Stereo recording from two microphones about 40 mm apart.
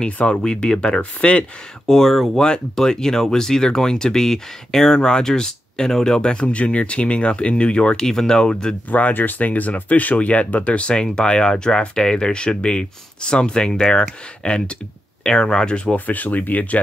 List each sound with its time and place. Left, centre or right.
0.0 s speech: left
1.9 s speech: centre
2.3 s speech: left
8.0 s speech: centre
9.1 s speech: left
16.1 s speech: left